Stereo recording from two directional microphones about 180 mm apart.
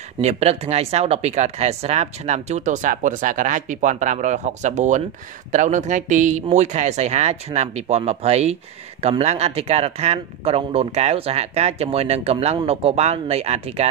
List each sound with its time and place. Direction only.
0.2 s speech: 35° right (ahead or behind)